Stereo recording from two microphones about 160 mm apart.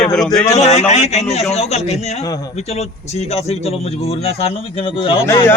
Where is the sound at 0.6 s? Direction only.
45° left (ahead or behind).